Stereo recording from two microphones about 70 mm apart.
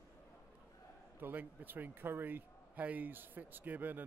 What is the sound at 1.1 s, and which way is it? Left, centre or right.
A man's voice, right.